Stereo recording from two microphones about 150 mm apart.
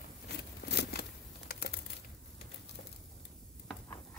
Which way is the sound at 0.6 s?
90° left.